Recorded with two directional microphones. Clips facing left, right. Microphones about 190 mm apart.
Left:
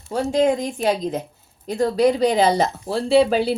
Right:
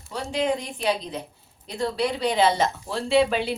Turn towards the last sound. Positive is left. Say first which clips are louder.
# left 5 dB
turn(degrees=40)  # may be behind; listen again after turning